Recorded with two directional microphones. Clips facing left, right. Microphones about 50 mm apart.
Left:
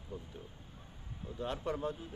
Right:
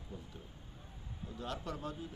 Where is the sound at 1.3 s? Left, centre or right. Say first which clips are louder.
Left 5 dB; left.